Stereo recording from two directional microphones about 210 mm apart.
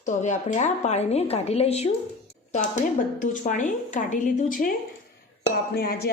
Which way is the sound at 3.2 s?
35° left (ahead or behind).